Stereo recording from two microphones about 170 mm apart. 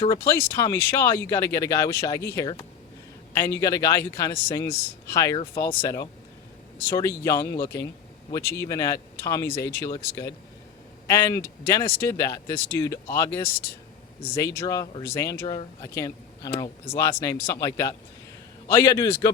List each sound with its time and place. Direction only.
0.2 s speech: 15° left (ahead or behind)